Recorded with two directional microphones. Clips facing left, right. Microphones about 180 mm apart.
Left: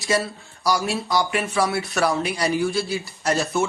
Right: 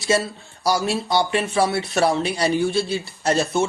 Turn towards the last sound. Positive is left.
turn(degrees=-20)  # may be behind; listen again after turning